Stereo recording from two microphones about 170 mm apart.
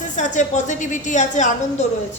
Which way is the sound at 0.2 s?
45° left (ahead or behind).